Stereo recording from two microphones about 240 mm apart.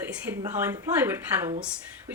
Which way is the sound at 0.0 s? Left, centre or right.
Centre.